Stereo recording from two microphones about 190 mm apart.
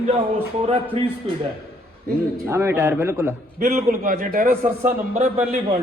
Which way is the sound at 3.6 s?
40° right (ahead or behind).